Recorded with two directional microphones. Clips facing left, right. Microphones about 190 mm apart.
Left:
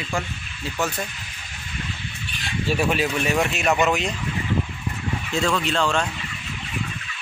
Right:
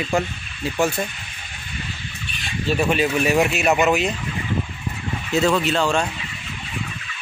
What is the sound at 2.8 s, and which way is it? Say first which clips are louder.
Speech: right 4 dB; centre (ahead or behind).